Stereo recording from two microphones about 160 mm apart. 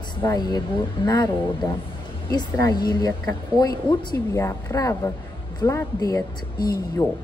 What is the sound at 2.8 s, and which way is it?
Speech, 25° left (ahead or behind).